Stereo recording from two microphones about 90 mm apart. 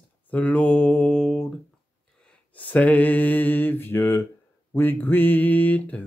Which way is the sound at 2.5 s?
15° left (ahead or behind).